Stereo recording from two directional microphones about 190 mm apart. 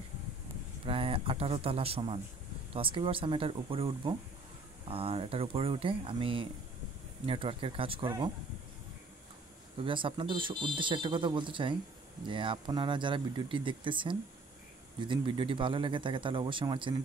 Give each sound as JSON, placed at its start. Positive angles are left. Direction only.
{"t": 0.8, "sound": "speech", "side_deg": -30}
{"t": 9.8, "sound": "speech", "side_deg": -25}